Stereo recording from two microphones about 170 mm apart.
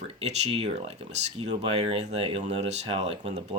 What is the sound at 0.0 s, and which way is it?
Speech, 40° right (ahead or behind).